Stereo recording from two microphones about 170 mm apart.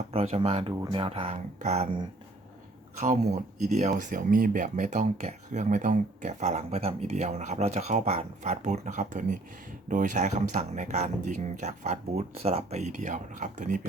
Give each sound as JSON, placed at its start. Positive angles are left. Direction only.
{"t": 0.1, "sound": "speech", "side_deg": -35}
{"t": 3.0, "sound": "speech", "side_deg": -45}